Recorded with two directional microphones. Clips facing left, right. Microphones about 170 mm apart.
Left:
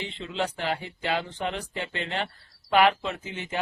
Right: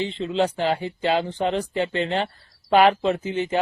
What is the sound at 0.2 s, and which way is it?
Speech, 30° right (ahead or behind).